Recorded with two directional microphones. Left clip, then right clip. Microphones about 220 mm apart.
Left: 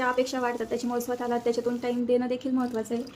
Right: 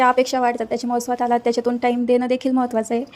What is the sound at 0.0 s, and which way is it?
A woman's voice, 35° right (ahead or behind).